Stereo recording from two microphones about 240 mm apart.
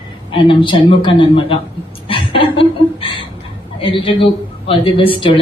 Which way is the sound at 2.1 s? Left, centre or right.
Left.